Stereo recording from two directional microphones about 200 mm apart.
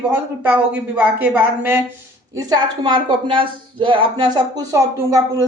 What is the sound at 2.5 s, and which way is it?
Speech, 25° right (ahead or behind).